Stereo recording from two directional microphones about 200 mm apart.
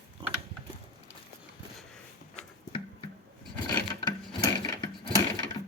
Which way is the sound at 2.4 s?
25° left (ahead or behind).